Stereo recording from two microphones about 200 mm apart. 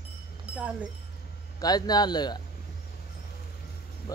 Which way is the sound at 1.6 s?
20° left (ahead or behind).